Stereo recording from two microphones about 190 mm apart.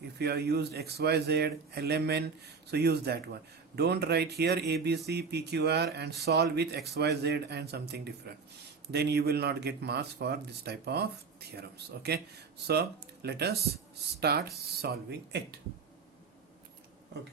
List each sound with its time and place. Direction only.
0.2 s a man's voice: 60° right (ahead or behind)